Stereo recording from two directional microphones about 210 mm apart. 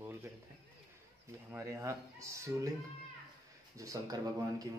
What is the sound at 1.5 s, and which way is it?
Speech, 10° right (ahead or behind).